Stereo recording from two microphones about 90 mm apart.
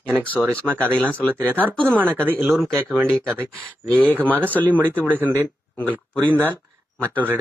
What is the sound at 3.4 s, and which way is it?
Speech, 15° left (ahead or behind).